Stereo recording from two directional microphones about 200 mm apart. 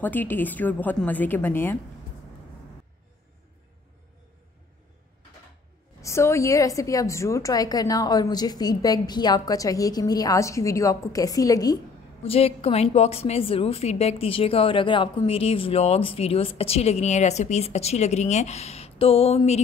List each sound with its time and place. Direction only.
0.0 s a woman's voice: 10° left (ahead or behind)
5.9 s a woman's voice: 15° left (ahead or behind)
12.2 s a woman's voice: 30° left (ahead or behind)